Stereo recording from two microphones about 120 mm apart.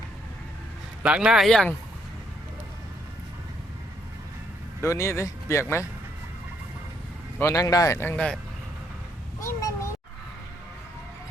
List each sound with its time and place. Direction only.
1.0 s speech: 10° right (ahead or behind)
4.8 s speech: 25° left (ahead or behind)
7.3 s speech: 25° left (ahead or behind); by 8.4 s 10° left (ahead or behind)
9.4 s a sound: 25° left (ahead or behind)